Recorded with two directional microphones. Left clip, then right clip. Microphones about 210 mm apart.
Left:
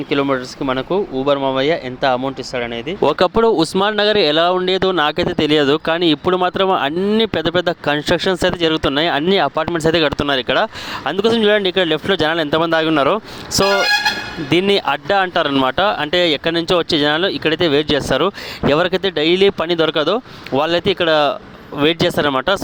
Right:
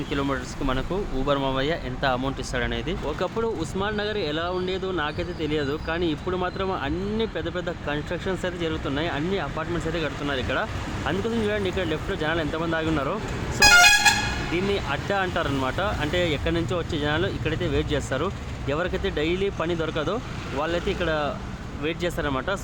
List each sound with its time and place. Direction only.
0.1 s speech: 30° left (ahead or behind)
3.1 s speech: 50° left (ahead or behind)